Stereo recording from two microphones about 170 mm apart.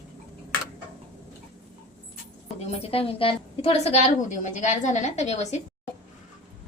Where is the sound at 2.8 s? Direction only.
35° left (ahead or behind).